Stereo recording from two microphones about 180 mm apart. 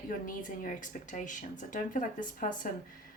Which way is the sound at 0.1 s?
50° left (ahead or behind).